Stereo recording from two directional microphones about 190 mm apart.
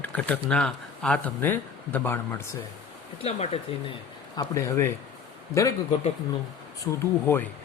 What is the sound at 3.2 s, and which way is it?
Speech, 35° left (ahead or behind).